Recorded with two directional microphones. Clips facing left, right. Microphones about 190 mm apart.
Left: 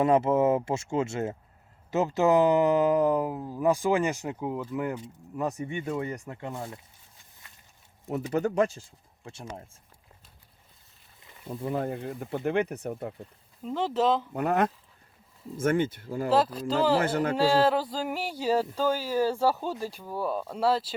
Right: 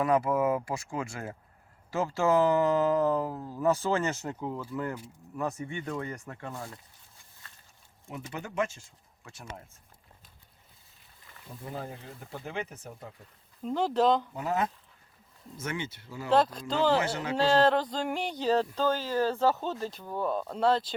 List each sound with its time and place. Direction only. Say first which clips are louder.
0.0 s speech: left 4 dB; 25° left (ahead or behind)
8.0 s speech: left 12 dB; 40° left (ahead or behind)
11.4 s speech: left 9 dB; 60° left (ahead or behind)
13.6 s speech: even; centre (ahead or behind)
14.3 s speech: left 5 dB; 60° left (ahead or behind)
15.5 s speech: left 11 dB; 50° left (ahead or behind)
16.3 s speech: even; 5° left (ahead or behind)
17.0 s speech: left 5 dB; 55° left (ahead or behind)
17.3 s speech: right 1 dB; 10° left (ahead or behind)